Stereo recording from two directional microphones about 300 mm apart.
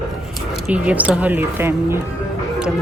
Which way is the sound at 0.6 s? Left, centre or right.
Centre.